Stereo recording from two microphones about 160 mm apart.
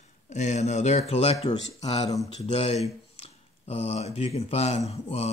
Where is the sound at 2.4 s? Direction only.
40° left (ahead or behind).